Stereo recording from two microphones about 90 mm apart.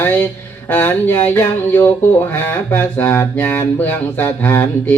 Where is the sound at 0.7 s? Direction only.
20° left (ahead or behind).